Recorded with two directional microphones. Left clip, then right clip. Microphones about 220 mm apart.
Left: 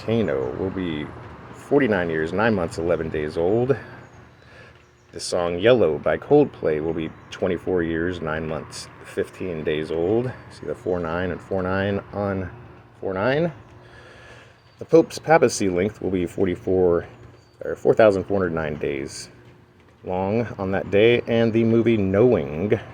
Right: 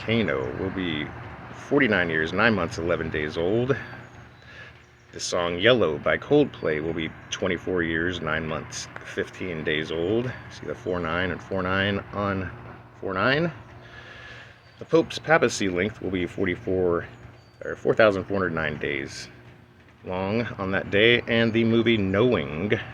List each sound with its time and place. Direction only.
0.0 s speech: 25° left (ahead or behind)
5.4 s speech: 25° left (ahead or behind)
14.8 s speech: 35° left (ahead or behind)